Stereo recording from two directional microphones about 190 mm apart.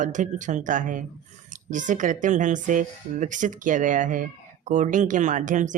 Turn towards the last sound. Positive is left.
turn(degrees=-40)  # may be behind; listen again after turning